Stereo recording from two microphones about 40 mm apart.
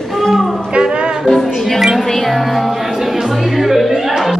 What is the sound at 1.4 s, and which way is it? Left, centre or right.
Music, centre.